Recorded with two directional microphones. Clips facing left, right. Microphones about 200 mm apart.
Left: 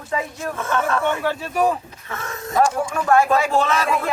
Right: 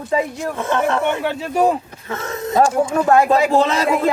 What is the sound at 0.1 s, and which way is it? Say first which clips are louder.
Speech: right 5 dB; 30° right (ahead or behind).